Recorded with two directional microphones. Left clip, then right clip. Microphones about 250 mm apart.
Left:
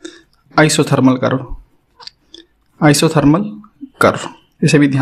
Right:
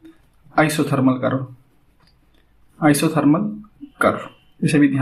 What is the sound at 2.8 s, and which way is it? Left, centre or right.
Speech, left.